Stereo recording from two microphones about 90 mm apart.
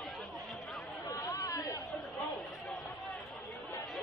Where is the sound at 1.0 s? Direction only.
35° left (ahead or behind).